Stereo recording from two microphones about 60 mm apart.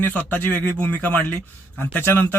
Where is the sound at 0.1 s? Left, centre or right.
Left.